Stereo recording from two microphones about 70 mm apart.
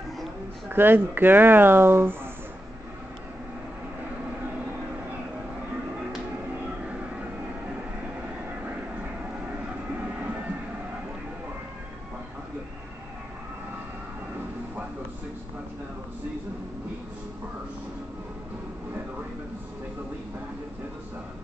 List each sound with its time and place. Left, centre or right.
0.7 s speech: right